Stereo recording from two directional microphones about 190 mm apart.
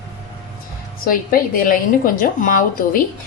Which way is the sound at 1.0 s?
50° left (ahead or behind).